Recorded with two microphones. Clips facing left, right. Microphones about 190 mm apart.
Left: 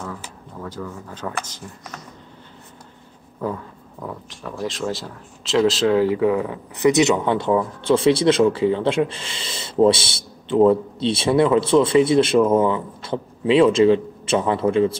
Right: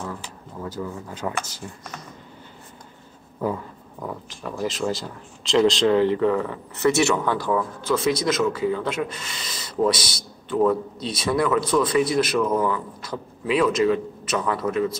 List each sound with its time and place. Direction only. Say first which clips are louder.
0.2 s speech: even; 10° right (ahead or behind)
3.3 s speech: right 1 dB; 5° right (ahead or behind); by 15.0 s 25° left (ahead or behind)